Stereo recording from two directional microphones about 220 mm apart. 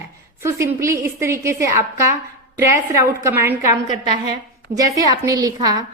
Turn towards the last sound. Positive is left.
turn(degrees=-15)  # may be behind; listen again after turning